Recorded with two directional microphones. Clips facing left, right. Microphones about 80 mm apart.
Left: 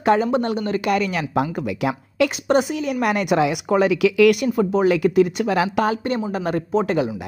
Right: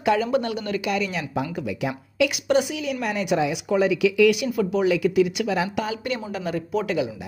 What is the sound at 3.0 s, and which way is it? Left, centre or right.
A woman's voice, left.